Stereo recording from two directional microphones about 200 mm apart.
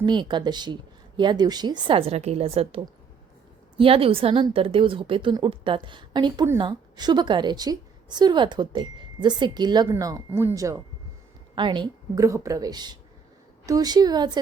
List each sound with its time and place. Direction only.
0.0 s a woman's voice: 25° right (ahead or behind)